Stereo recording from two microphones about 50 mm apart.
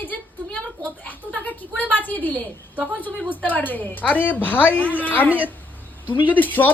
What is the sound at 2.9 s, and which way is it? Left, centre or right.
A woman's voice, left.